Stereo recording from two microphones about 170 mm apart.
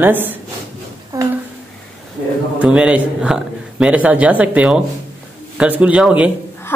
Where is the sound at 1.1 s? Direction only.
20° right (ahead or behind).